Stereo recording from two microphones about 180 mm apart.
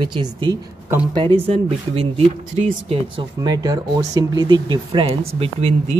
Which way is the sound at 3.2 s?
20° right (ahead or behind).